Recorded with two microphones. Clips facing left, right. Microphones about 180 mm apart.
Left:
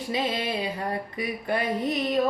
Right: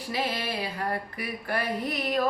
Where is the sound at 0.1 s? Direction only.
20° left (ahead or behind).